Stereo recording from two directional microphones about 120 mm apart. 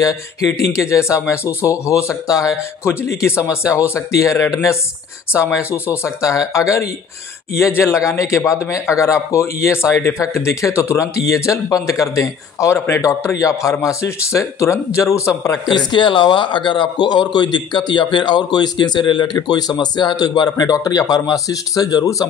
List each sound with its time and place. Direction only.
0.5 s a man's voice: 25° left (ahead or behind)
15.9 s a man's voice: 40° left (ahead or behind)